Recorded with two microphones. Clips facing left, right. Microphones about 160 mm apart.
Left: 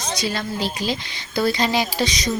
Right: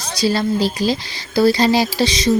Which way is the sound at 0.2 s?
35° right (ahead or behind).